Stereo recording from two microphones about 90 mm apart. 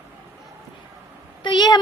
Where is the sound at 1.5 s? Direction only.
55° left (ahead or behind).